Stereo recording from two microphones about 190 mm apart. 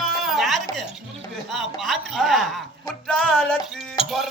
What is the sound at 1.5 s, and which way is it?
Speech, centre (ahead or behind).